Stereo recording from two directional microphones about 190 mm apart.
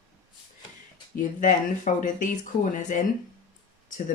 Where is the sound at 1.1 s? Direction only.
45° left (ahead or behind).